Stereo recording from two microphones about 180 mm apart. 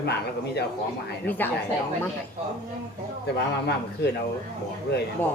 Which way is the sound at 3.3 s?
65° left (ahead or behind).